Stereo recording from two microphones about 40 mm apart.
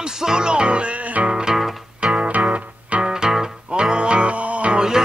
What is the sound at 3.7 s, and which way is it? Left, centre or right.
Music, right.